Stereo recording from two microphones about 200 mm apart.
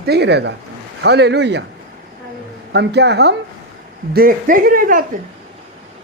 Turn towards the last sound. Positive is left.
turn(degrees=-45)  # may be behind; listen again after turning